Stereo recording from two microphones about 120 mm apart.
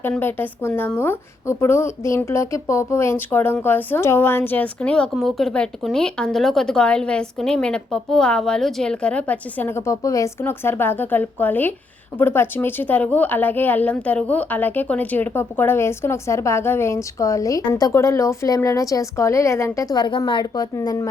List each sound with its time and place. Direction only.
0.2 s a woman's voice: 15° left (ahead or behind)